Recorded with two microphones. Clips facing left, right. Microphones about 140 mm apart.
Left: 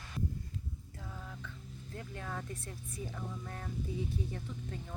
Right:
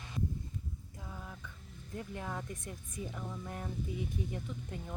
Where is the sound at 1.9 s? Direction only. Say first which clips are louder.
Right 2 dB; 15° right (ahead or behind).